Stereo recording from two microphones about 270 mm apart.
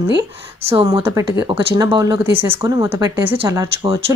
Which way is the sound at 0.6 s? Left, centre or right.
Centre.